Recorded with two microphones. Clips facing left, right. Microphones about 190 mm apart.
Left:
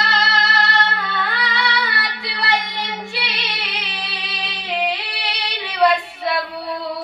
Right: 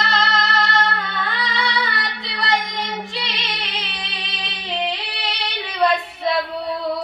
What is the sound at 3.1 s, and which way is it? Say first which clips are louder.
Music: even; 5° left (ahead or behind).